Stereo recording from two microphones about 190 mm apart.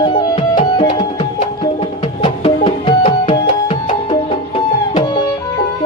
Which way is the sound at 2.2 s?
30° left (ahead or behind).